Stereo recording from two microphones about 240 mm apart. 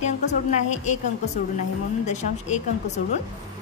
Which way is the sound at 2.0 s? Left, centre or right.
Left.